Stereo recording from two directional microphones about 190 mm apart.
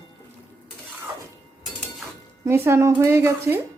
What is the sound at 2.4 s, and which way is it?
Speech, 15° right (ahead or behind).